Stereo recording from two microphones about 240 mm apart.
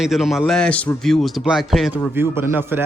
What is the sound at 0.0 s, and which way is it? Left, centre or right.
A man's voice, centre.